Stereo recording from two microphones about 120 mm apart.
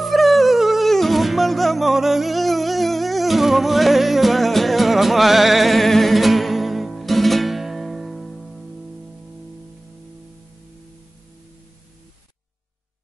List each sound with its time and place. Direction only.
0.0 s music: centre (ahead or behind)